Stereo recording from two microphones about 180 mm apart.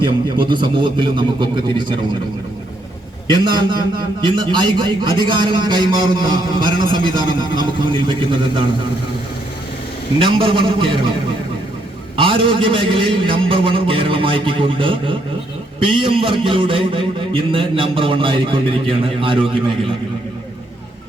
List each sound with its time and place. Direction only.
0.0 s a man's voice: 25° right (ahead or behind)
3.3 s a man's voice: 25° right (ahead or behind)
10.2 s a man's voice: 30° right (ahead or behind)
12.1 s a man's voice: 30° right (ahead or behind)